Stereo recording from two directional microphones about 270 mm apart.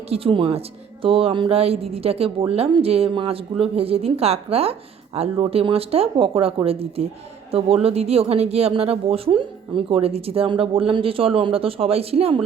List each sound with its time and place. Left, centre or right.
0.1 s speech: centre